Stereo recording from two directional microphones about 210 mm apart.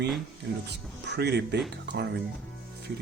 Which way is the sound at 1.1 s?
50° right (ahead or behind).